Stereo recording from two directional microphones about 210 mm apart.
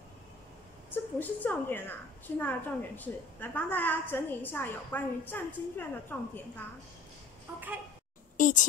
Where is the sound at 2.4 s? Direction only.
10° left (ahead or behind).